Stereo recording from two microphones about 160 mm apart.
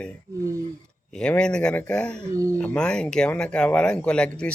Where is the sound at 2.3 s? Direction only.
20° right (ahead or behind).